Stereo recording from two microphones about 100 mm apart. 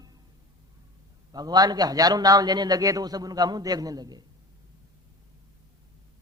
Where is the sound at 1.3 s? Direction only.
40° right (ahead or behind).